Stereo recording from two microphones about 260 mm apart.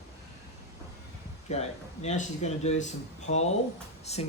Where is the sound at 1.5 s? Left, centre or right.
Left.